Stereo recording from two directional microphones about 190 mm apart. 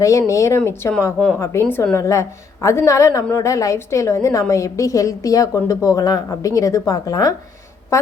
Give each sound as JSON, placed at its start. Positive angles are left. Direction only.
{"t": 0.0, "sound": "a woman's voice", "side_deg": 15}